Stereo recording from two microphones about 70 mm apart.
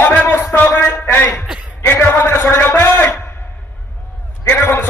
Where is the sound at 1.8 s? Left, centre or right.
Left.